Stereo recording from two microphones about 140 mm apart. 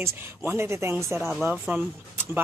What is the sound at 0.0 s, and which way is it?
Speech, 15° right (ahead or behind).